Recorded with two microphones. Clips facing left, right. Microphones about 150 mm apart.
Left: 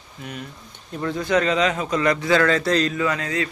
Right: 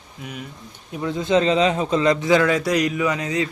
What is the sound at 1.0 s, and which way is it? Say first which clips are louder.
A man's voice: right 2 dB; 20° right (ahead or behind).